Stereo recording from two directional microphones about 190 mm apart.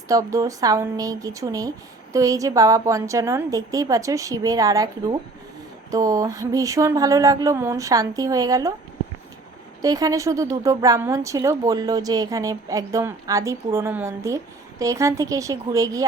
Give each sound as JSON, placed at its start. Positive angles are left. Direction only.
{"t": 0.1, "sound": "a woman's voice", "side_deg": -15}
{"t": 9.8, "sound": "a woman's voice", "side_deg": -20}